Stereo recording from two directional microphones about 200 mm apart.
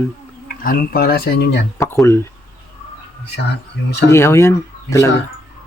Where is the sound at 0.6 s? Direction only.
45° left (ahead or behind).